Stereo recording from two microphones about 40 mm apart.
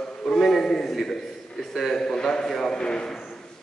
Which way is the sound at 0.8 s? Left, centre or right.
Centre.